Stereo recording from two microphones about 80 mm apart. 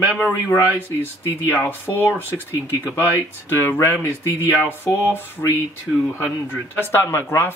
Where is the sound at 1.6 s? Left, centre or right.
Left.